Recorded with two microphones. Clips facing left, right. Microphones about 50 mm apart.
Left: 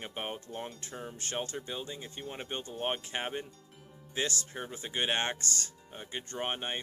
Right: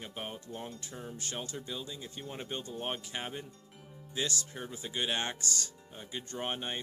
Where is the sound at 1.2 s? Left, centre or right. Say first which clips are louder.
Left 5 dB; left.